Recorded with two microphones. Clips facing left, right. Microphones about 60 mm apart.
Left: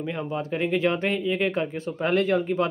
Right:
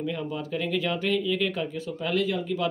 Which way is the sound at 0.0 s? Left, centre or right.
Left.